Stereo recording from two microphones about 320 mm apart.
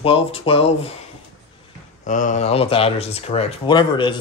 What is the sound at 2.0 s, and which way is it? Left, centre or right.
Speech, left.